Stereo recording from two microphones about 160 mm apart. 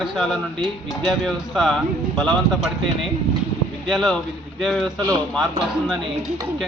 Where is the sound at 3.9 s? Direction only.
Centre (ahead or behind).